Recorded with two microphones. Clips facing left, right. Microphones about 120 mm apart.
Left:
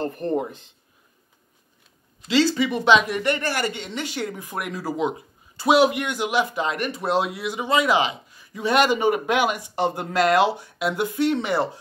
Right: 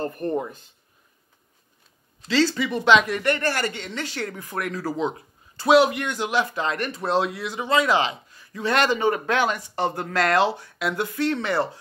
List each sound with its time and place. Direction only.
0.1 s speech: 25° left (ahead or behind)
2.2 s speech: 20° left (ahead or behind)